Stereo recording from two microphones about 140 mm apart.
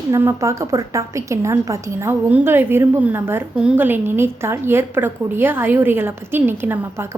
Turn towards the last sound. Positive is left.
turn(degrees=-15)  # may be behind; listen again after turning